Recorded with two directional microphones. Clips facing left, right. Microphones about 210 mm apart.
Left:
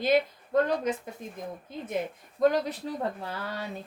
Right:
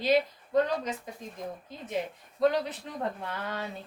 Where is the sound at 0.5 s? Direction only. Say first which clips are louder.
Left 2 dB; 50° left (ahead or behind).